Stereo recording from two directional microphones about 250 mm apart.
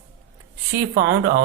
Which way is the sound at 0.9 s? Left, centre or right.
Right.